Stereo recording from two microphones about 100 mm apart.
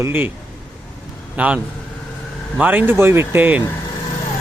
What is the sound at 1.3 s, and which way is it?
Speech, 15° right (ahead or behind).